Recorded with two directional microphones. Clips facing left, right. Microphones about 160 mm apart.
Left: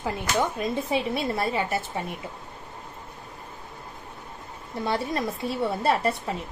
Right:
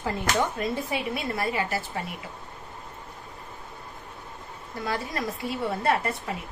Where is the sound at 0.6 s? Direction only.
25° left (ahead or behind).